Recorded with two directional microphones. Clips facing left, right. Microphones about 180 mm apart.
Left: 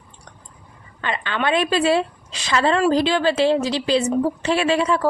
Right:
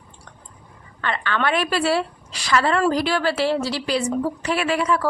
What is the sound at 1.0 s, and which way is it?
A woman's voice, 15° left (ahead or behind).